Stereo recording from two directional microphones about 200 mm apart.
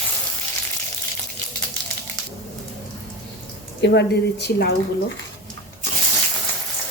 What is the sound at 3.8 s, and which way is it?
Speech, 55° left (ahead or behind).